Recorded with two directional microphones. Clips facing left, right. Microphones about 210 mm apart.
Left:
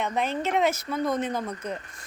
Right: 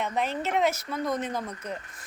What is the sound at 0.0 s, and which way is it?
Speech, 5° right (ahead or behind).